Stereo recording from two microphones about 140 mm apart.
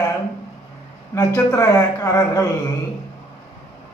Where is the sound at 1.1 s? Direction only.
25° left (ahead or behind).